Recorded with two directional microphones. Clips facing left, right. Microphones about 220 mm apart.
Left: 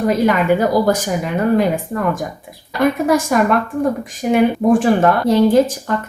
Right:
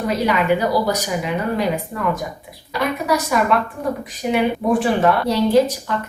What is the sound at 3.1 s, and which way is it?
Speech, 45° left (ahead or behind).